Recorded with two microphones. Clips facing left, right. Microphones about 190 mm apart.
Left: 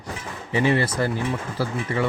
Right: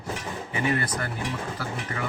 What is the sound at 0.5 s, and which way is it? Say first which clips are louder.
Speech: left 7 dB; 30° left (ahead or behind).